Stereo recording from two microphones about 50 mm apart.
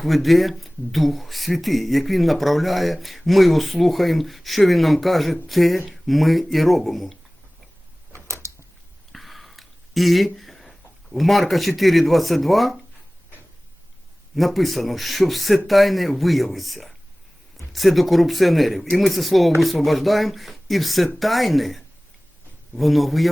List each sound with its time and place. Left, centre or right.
0.0 s speech: centre
8.3 s a sound: right
9.1 s a sound: centre
11.8 s speech: centre
14.3 s speech: centre
22.8 s speech: centre